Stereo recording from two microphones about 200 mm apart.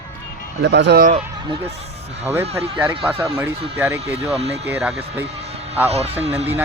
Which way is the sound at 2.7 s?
10° right (ahead or behind).